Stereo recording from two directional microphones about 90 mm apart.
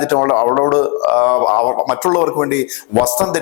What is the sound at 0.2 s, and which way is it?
Speech, 25° left (ahead or behind).